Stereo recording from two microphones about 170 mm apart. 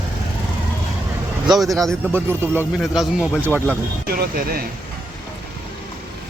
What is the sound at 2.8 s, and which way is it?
Speech, centre (ahead or behind).